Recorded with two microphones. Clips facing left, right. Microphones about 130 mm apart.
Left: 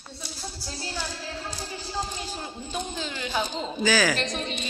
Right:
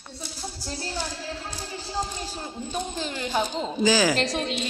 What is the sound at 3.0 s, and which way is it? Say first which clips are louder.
Speech: right 3 dB; 45° right (ahead or behind).